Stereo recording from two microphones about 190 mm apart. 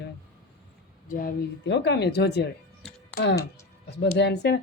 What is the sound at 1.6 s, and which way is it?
Speech, 65° left (ahead or behind).